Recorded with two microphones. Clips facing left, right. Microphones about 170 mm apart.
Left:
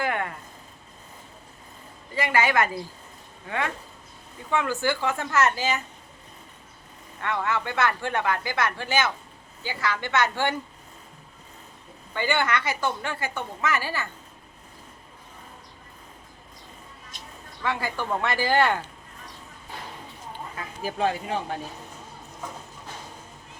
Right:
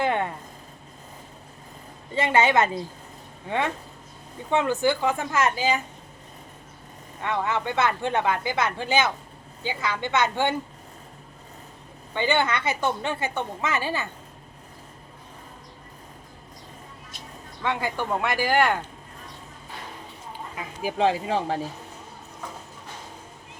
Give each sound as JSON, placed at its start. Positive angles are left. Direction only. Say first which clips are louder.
{"t": 0.0, "sound": "a sound", "louder": "right 3 dB", "side_deg": -25}
{"t": 2.1, "sound": "a woman's voice", "louder": "right 3 dB", "side_deg": -25}
{"t": 4.5, "sound": "a woman's voice", "louder": "right 3 dB", "side_deg": -20}
{"t": 7.2, "sound": "a woman's voice", "louder": "right 1 dB", "side_deg": -20}
{"t": 12.1, "sound": "a woman's voice", "louder": "right 2 dB", "side_deg": -20}
{"t": 17.6, "sound": "a woman's voice", "louder": "right 2 dB", "side_deg": -20}
{"t": 20.6, "sound": "speech", "louder": "right 3 dB", "side_deg": -20}